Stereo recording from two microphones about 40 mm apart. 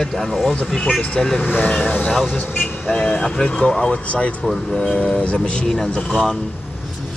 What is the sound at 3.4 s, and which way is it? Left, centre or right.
Speech, left.